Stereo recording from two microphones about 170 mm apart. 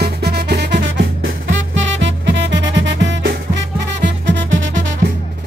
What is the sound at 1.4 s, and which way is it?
Music, 90° right.